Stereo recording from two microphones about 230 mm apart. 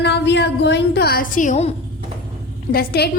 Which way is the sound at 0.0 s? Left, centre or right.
Left.